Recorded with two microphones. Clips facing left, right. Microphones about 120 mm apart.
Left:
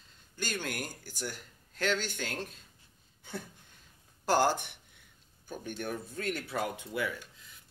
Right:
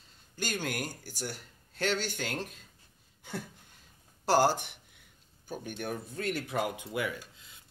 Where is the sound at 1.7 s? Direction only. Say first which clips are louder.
Even; 40° right (ahead or behind).